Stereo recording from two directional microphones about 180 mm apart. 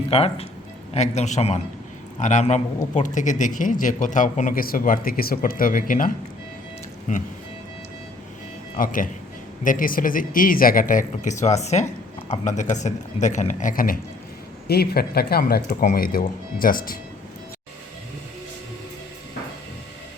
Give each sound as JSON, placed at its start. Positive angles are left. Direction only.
{"t": 0.1, "sound": "a man's voice", "side_deg": 35}
{"t": 7.1, "sound": "speech", "side_deg": 40}
{"t": 8.8, "sound": "a man's voice", "side_deg": 50}